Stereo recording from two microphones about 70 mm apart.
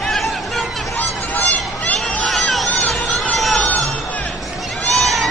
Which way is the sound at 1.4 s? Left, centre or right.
Centre.